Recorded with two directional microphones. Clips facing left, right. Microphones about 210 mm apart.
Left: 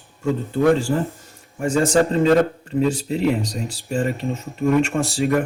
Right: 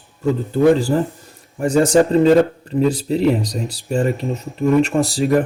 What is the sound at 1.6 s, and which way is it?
Speech, 40° right (ahead or behind).